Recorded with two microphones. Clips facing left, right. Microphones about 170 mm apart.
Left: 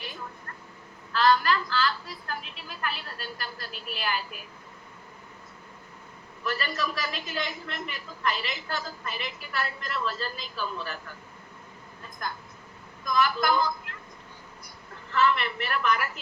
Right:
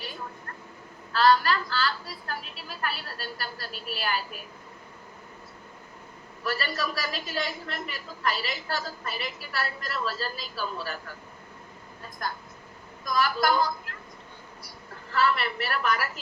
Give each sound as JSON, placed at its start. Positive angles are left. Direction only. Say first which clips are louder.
{"t": 1.1, "sound": "a woman's voice", "louder": "right 1 dB", "side_deg": -35}
{"t": 6.4, "sound": "a woman's voice", "louder": "even", "side_deg": -40}
{"t": 13.1, "sound": "a woman's voice", "louder": "even", "side_deg": -40}
{"t": 15.1, "sound": "a woman's voice", "louder": "left 1 dB", "side_deg": -40}